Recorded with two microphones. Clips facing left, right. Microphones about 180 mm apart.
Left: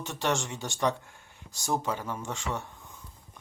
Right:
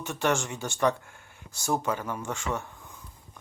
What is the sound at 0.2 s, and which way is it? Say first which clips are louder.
Speech: right 3 dB; 20° left (ahead or behind).